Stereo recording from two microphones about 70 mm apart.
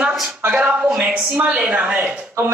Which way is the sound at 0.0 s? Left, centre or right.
Centre.